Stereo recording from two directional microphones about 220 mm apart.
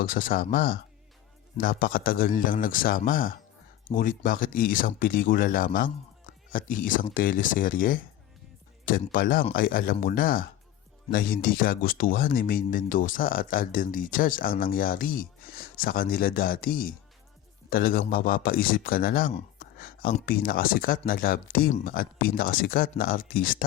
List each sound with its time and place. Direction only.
0.0 s speech: 40° left (ahead or behind)
19.5 s a sound: 40° left (ahead or behind)
20.1 s speech: 40° left (ahead or behind)